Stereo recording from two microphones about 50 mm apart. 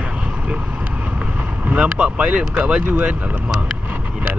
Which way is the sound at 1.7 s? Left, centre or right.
Centre.